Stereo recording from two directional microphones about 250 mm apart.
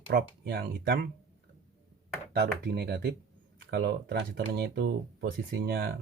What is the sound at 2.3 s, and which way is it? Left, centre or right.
Speech, right.